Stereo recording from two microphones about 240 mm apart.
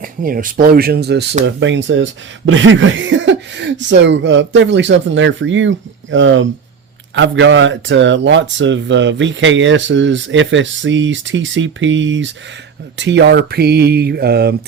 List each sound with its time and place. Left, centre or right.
0.0 s speech: right